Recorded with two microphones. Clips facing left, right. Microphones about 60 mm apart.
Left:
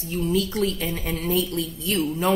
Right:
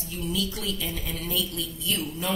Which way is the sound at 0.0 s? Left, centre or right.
Left.